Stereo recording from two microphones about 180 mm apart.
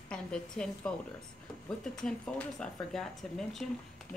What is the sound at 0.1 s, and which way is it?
Speech, 5° left (ahead or behind).